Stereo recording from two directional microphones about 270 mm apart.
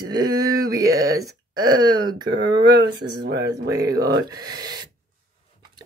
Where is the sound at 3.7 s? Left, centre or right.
Centre.